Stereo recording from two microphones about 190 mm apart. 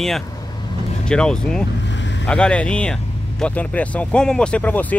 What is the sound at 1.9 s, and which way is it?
Vehicle, 70° left (ahead or behind).